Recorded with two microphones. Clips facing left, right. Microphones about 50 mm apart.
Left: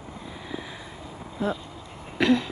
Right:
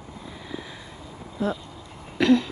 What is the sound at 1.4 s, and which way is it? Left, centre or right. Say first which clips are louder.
Speech: right 1 dB; left.